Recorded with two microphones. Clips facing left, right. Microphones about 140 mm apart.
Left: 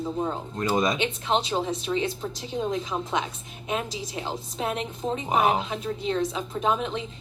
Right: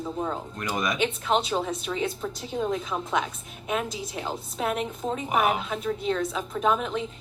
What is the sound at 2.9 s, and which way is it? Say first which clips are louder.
Speech: left 1 dB; 15° left (ahead or behind).